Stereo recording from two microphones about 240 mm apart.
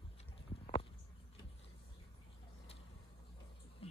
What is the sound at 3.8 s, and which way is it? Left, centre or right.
Music, left.